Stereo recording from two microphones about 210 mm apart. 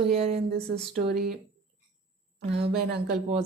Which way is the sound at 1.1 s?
45° right (ahead or behind).